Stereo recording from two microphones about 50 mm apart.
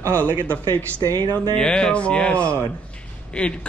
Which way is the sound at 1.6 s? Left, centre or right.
Centre.